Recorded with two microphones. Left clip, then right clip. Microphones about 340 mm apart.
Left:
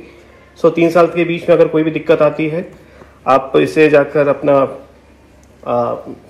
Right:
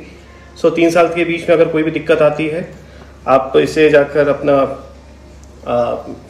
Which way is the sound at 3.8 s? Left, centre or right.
Centre.